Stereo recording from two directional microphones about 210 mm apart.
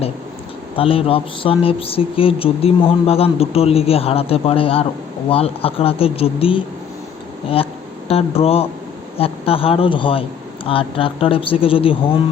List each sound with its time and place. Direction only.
0.8 s speech: 25° left (ahead or behind)